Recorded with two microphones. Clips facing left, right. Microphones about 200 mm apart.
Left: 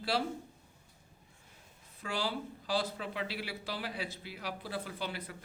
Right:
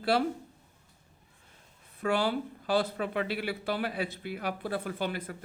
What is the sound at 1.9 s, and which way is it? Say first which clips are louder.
Speech: right 8 dB; 60° right (ahead or behind).